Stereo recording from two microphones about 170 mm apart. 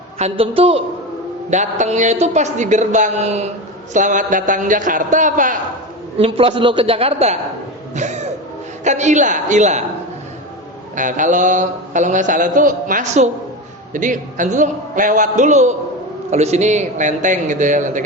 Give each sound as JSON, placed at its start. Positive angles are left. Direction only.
{"t": 0.2, "sound": "a man's voice", "side_deg": -35}
{"t": 1.5, "sound": "a man's voice", "side_deg": -45}
{"t": 6.1, "sound": "a man's voice", "side_deg": -35}
{"t": 7.9, "sound": "a sound", "side_deg": -45}
{"t": 8.8, "sound": "a man's voice", "side_deg": -45}
{"t": 10.9, "sound": "a man's voice", "side_deg": -50}